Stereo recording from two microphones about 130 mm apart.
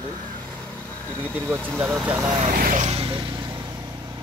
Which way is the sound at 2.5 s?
85° right.